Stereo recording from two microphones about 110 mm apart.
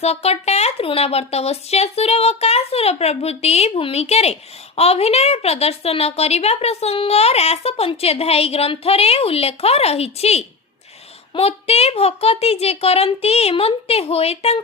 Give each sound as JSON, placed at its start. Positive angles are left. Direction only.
{"t": 0.0, "sound": "speech", "side_deg": 75}